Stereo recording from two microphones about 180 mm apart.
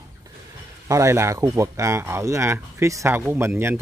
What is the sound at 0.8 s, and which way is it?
Speech, 15° right (ahead or behind).